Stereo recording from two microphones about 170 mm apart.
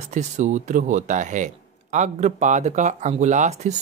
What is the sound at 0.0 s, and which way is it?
Speech, 45° right (ahead or behind).